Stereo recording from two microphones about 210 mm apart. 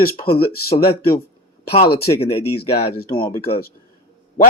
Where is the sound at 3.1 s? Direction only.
15° left (ahead or behind).